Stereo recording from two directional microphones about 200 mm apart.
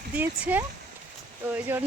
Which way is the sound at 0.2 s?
10° right (ahead or behind).